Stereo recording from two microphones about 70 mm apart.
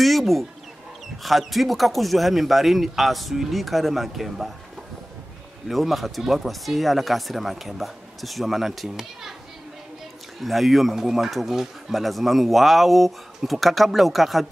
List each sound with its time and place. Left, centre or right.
0.0 s bird: centre
1.2 s speech: centre
5.7 s speech: centre
10.4 s speech: centre